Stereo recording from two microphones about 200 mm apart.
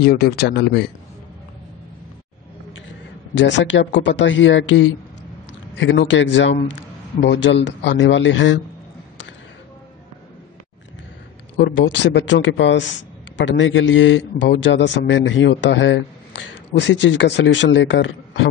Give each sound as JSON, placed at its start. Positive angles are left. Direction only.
{"t": 0.0, "sound": "speech", "side_deg": 50}
{"t": 3.3, "sound": "a man's voice", "side_deg": 65}
{"t": 11.5, "sound": "a man's voice", "side_deg": 65}